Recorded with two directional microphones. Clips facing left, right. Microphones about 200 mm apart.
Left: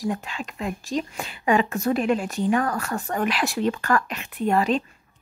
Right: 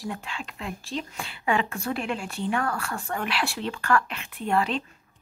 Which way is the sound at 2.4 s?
15° left (ahead or behind).